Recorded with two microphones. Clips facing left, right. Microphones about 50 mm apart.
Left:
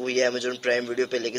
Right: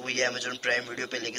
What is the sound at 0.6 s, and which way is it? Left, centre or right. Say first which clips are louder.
Speech: left 5 dB; centre.